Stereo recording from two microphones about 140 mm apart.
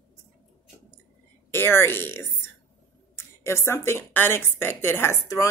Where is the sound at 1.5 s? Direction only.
15° left (ahead or behind).